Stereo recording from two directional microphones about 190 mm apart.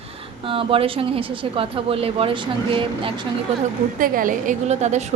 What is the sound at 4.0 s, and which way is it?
A woman's voice, 45° right (ahead or behind).